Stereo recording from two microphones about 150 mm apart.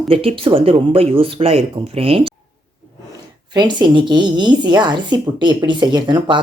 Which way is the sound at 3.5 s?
30° right (ahead or behind).